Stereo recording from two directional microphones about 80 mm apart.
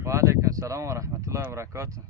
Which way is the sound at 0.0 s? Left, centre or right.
Right.